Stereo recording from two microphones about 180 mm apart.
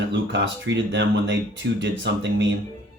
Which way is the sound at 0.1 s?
90° right.